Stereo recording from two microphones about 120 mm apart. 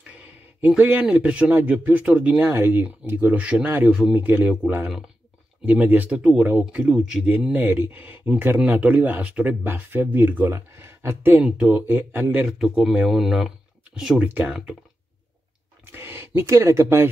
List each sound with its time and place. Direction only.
0.7 s speech: 10° right (ahead or behind)
7.5 s speech: 15° right (ahead or behind)
11.4 s speech: 10° right (ahead or behind)
12.4 s speech: 5° right (ahead or behind)
15.9 s speech: 15° right (ahead or behind)